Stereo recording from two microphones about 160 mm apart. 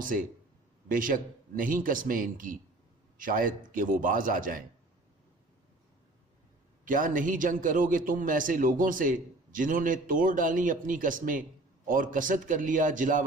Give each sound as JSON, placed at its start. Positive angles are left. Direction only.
{"t": 0.0, "sound": "a man's voice", "side_deg": -55}
{"t": 6.8, "sound": "a man's voice", "side_deg": -55}